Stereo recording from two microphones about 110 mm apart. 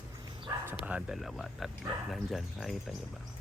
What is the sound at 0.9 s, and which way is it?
Speech, 10° right (ahead or behind).